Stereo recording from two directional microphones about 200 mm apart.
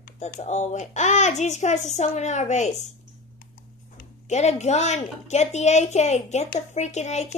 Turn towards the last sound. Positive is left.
turn(degrees=35)  # may be behind; listen again after turning